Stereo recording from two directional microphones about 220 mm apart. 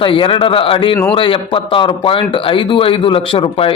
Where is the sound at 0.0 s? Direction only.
25° left (ahead or behind).